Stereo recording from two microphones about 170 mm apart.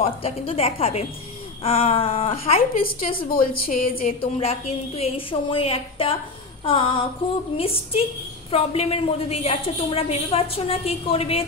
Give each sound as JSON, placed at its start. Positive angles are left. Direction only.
{"t": 0.0, "sound": "a woman's voice", "side_deg": 35}
{"t": 2.8, "sound": "a woman's voice", "side_deg": 60}
{"t": 4.2, "sound": "a woman's voice", "side_deg": 35}